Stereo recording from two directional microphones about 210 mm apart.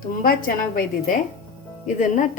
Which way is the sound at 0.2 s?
45° left (ahead or behind).